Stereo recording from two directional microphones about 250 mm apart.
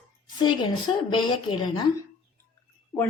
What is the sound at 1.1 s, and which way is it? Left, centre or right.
Speech, centre.